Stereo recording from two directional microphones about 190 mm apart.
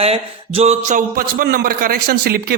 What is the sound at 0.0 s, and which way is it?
A man's voice, 30° right (ahead or behind).